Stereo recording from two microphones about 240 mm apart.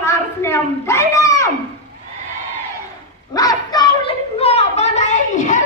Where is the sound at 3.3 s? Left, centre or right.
Centre.